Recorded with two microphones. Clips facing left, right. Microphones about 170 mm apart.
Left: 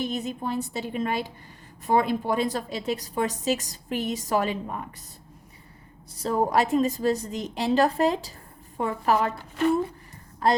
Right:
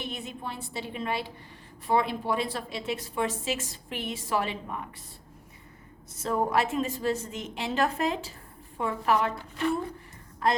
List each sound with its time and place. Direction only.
0.0 s a woman's voice: 40° left (ahead or behind)
6.1 s a woman's voice: 35° left (ahead or behind)